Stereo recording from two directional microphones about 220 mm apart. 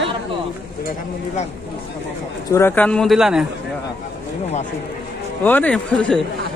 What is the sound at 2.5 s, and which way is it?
Speech, 10° left (ahead or behind).